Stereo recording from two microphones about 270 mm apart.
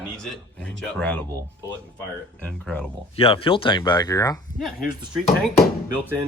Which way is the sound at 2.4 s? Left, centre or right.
Centre.